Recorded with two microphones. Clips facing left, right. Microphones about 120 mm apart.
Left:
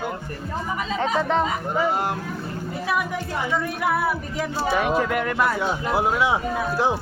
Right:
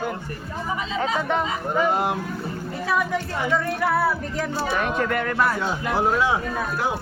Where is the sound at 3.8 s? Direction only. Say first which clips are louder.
Right 1 dB; 15° left (ahead or behind).